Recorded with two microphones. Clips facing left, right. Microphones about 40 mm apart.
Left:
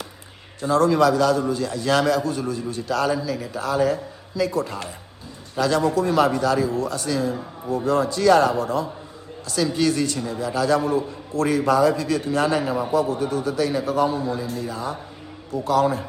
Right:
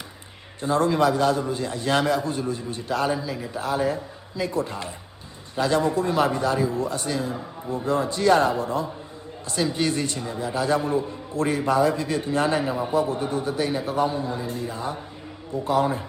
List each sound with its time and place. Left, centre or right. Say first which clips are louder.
0.6 s a man's voice: left 3 dB; right